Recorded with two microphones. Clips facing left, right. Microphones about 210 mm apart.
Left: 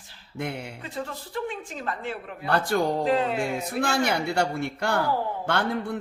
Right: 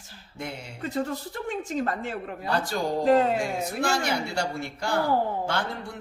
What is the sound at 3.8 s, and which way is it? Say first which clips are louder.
A man's voice: left 3 dB; 60° left (ahead or behind).